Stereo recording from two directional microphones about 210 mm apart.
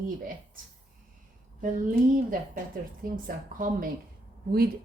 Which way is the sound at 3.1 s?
40° right (ahead or behind).